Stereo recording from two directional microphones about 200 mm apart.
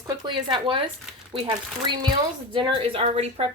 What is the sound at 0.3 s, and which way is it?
Speech, 25° right (ahead or behind).